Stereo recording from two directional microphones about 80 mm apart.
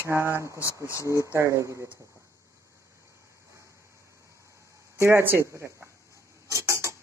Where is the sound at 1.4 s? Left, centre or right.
Right.